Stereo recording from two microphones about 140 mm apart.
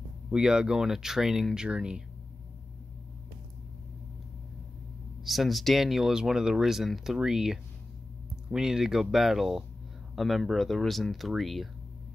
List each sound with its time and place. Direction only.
0.3 s speech: 5° right (ahead or behind)
5.2 s speech: centre (ahead or behind)